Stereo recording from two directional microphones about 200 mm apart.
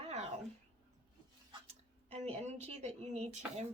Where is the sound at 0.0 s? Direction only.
35° right (ahead or behind).